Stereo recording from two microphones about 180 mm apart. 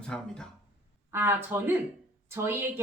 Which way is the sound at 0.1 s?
5° left (ahead or behind).